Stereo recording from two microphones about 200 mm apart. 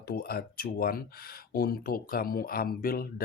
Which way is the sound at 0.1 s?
50° left (ahead or behind).